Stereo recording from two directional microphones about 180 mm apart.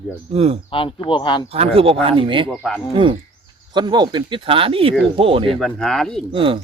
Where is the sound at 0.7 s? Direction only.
30° left (ahead or behind).